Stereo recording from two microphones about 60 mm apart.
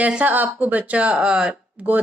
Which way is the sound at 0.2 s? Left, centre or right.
Right.